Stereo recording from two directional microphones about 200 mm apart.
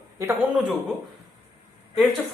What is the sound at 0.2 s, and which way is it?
Speech, 15° right (ahead or behind).